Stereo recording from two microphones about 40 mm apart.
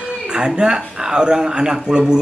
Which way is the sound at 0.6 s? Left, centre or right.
Centre.